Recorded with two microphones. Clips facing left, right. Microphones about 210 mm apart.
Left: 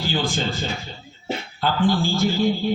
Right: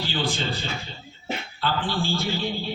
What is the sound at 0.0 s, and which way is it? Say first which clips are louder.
Speech: left 3 dB; 45° left (ahead or behind).